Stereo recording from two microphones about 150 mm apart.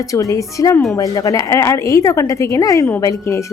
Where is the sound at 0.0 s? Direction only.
20° left (ahead or behind).